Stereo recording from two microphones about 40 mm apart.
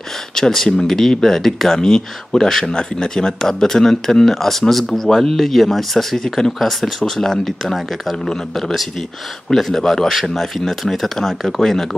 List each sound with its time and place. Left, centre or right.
0.3 s speech: centre